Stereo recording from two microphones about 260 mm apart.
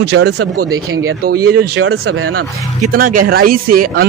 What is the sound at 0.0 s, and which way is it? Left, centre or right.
Speech, right.